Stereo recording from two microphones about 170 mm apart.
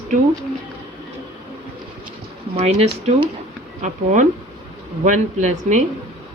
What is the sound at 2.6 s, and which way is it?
Speech, 40° right (ahead or behind).